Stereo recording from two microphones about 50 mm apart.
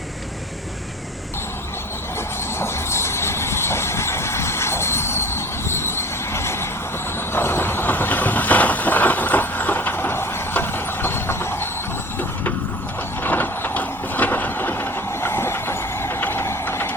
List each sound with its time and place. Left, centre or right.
2.6 s vehicle: left
13.2 s a sound: left
16.6 s vehicle: left